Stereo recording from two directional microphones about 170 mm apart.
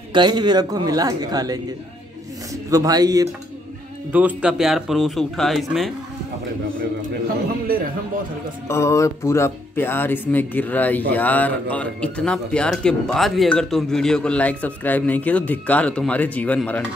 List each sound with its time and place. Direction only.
0.1 s speech: 25° right (ahead or behind)
2.7 s speech: 20° right (ahead or behind)
4.1 s speech: 10° right (ahead or behind)
7.7 s a man's voice: 60° right (ahead or behind)
8.6 s speech: 15° left (ahead or behind)